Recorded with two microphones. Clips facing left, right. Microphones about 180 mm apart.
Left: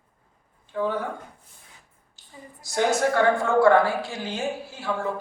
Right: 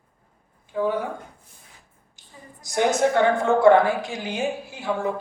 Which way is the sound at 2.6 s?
20° right (ahead or behind).